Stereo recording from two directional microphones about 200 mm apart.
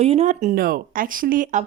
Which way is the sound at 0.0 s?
30° right (ahead or behind).